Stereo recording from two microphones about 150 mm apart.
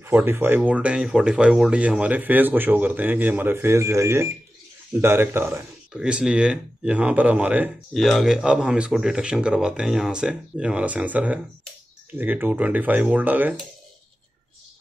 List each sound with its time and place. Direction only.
0.0 s speech: 15° right (ahead or behind)
7.9 s speech: centre (ahead or behind)